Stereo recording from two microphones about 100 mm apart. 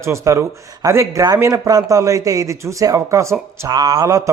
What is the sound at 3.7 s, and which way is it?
Speech, 40° right (ahead or behind).